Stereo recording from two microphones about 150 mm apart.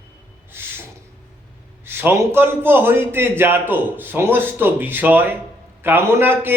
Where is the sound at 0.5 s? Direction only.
15° right (ahead or behind).